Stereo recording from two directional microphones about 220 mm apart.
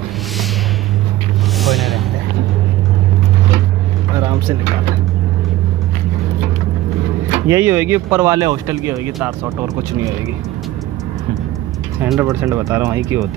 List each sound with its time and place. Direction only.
1.6 s vehicle: centre (ahead or behind)
4.1 s vehicle: 15° right (ahead or behind)
7.4 s speech: 10° right (ahead or behind)
12.0 s speech: 10° right (ahead or behind)